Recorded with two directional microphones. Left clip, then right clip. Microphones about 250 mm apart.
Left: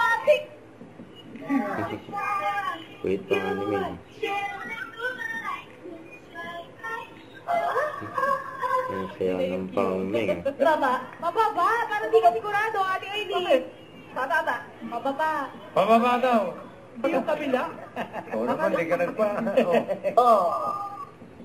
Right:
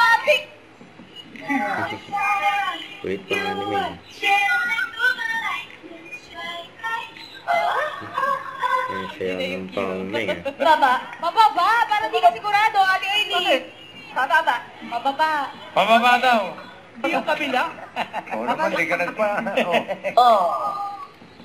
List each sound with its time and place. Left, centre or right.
1.4 s a sound: centre
3.3 s male singing: centre
4.9 s music: centre
9.3 s speech: centre
9.8 s a sound: right
10.4 s a woman's voice: centre